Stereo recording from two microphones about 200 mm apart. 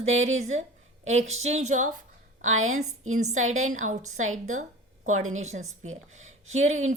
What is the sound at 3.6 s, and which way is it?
Speech, 40° right (ahead or behind).